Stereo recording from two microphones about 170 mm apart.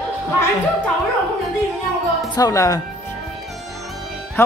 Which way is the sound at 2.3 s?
20° left (ahead or behind).